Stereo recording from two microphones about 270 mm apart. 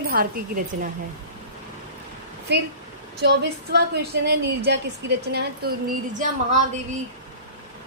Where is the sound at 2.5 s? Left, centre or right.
Right.